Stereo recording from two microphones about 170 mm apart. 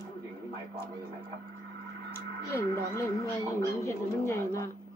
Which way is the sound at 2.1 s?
15° left (ahead or behind).